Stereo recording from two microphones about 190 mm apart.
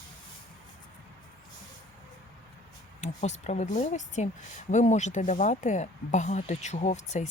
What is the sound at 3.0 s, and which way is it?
Speech, 35° left (ahead or behind).